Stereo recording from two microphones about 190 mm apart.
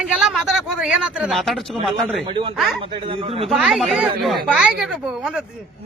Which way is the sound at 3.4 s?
Centre (ahead or behind).